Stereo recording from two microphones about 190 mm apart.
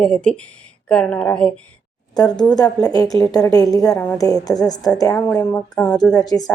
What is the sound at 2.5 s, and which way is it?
A woman's voice, 20° left (ahead or behind).